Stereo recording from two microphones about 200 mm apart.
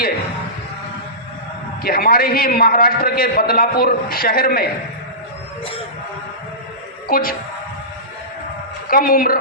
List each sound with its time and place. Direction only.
1.8 s a man's voice: 50° left (ahead or behind)
7.1 s a man's voice: 45° left (ahead or behind)
8.9 s a man's voice: 45° left (ahead or behind)